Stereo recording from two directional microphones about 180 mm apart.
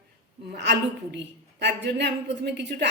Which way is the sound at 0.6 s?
70° right (ahead or behind).